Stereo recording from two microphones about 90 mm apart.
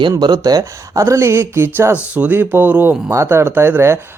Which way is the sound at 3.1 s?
30° right (ahead or behind).